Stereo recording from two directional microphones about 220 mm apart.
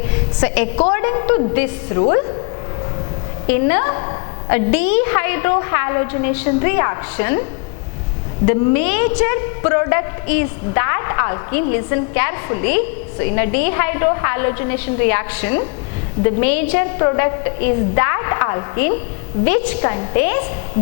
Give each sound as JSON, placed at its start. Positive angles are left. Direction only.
{"t": 0.1, "sound": "a sound", "side_deg": 10}
{"t": 0.9, "sound": "a woman's voice", "side_deg": 15}
{"t": 3.5, "sound": "a woman's voice", "side_deg": 10}
{"t": 8.4, "sound": "a woman's voice", "side_deg": 15}